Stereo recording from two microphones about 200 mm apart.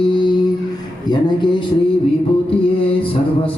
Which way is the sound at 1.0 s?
20° left (ahead or behind).